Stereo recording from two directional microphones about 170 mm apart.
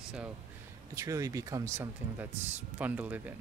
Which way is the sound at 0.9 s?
20° right (ahead or behind).